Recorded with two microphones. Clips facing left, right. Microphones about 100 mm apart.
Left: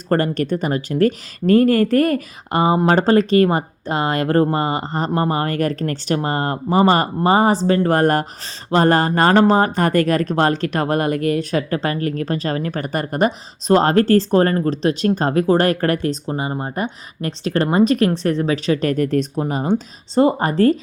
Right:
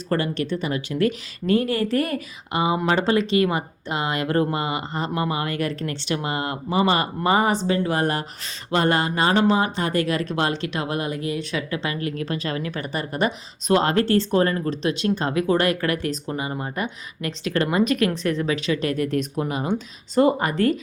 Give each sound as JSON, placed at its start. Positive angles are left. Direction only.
{"t": 0.1, "sound": "speech", "side_deg": 45}
{"t": 7.2, "sound": "speech", "side_deg": 35}
{"t": 8.7, "sound": "speech", "side_deg": 40}